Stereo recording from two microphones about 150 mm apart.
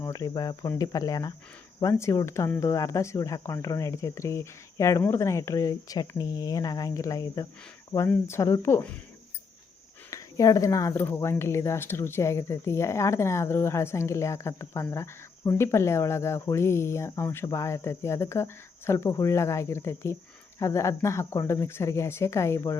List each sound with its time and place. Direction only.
0.0 s speech: 20° left (ahead or behind)
10.1 s speech: 20° left (ahead or behind)